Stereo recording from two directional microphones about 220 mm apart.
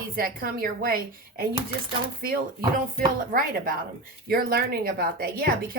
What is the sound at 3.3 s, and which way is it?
A woman's voice, 40° right (ahead or behind).